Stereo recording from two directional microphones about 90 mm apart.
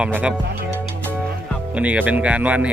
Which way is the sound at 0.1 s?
15° right (ahead or behind).